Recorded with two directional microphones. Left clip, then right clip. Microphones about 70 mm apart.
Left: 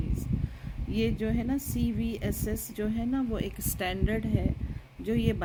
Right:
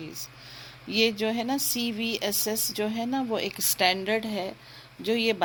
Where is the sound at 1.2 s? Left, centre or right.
Left.